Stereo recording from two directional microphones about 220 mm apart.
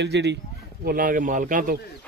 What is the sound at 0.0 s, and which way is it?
Speech, 50° right (ahead or behind).